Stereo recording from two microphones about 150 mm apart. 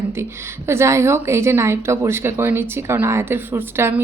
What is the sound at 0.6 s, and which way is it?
A woman's voice, 20° right (ahead or behind).